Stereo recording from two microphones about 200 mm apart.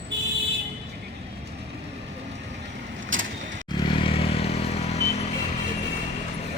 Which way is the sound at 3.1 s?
75° right (ahead or behind).